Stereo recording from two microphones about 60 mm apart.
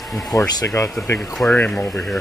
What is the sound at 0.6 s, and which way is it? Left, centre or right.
Speech, left.